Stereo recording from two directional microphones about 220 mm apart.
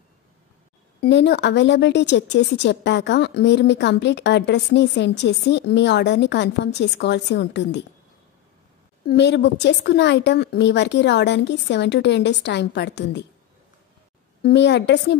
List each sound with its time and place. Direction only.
1.0 s speech: 50° left (ahead or behind)
9.0 s speech: 50° left (ahead or behind)
14.4 s speech: 50° left (ahead or behind)